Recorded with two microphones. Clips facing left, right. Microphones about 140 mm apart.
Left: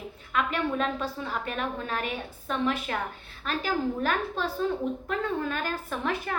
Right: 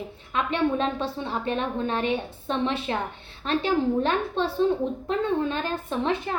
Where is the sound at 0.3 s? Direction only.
30° right (ahead or behind).